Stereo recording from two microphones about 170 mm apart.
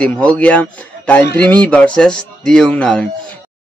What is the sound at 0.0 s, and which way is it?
A man's voice, 5° left (ahead or behind).